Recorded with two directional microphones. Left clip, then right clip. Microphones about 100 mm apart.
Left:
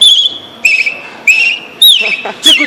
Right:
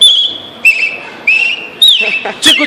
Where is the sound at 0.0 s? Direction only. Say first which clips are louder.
Left 1 dB; 20° right (ahead or behind).